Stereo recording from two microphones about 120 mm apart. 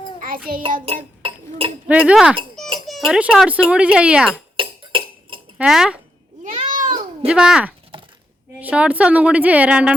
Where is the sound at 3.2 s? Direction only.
10° right (ahead or behind).